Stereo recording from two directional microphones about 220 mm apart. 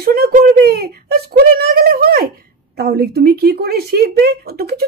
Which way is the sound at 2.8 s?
45° right (ahead or behind).